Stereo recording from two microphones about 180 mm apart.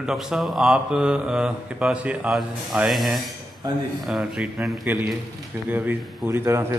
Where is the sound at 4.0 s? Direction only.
Centre (ahead or behind).